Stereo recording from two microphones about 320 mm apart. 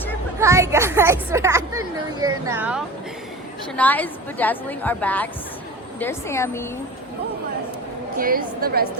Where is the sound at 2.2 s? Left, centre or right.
Centre.